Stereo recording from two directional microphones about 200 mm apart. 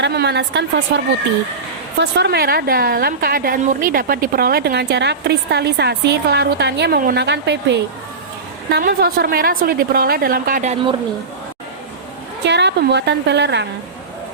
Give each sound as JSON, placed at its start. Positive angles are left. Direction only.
{"t": 0.0, "sound": "a woman's voice", "side_deg": -55}
{"t": 12.5, "sound": "a woman's voice", "side_deg": -60}